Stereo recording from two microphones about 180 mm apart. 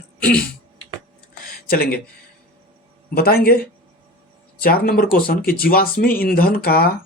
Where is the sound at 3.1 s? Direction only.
55° left (ahead or behind).